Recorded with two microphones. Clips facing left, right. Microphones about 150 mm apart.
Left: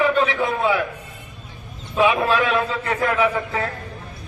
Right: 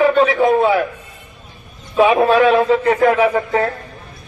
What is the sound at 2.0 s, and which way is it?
Speech, 40° right (ahead or behind).